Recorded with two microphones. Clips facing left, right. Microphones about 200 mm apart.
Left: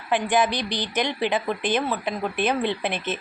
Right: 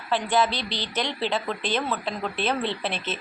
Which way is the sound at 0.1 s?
15° left (ahead or behind).